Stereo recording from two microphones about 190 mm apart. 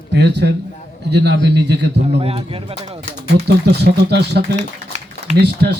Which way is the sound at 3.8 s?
60° right (ahead or behind).